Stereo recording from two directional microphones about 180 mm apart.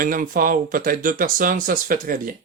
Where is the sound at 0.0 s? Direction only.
50° right (ahead or behind).